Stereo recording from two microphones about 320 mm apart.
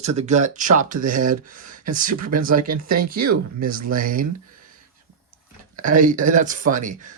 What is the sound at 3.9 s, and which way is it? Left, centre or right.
Speech, right.